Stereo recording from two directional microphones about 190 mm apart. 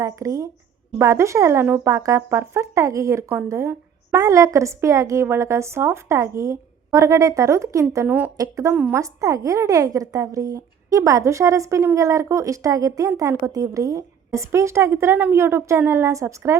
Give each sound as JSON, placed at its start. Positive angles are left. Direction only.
{"t": 0.0, "sound": "speech", "side_deg": -15}